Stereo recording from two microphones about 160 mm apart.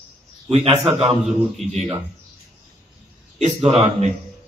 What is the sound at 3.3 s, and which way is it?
Speech, 45° right (ahead or behind).